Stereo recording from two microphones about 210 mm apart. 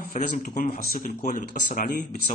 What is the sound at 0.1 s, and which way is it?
Speech, 40° left (ahead or behind).